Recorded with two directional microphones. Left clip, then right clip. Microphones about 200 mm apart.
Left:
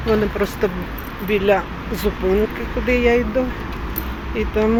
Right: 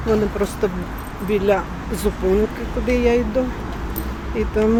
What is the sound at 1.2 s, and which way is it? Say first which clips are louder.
Speech: left 1 dB; 15° right (ahead or behind).